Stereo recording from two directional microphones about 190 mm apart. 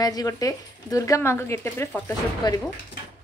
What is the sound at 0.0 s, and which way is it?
A woman's voice, 20° left (ahead or behind).